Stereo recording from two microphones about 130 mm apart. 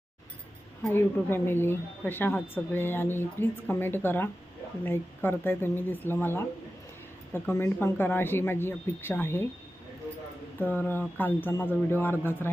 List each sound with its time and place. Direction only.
0.9 s a woman's voice: 20° left (ahead or behind)
10.6 s a woman's voice: 15° left (ahead or behind)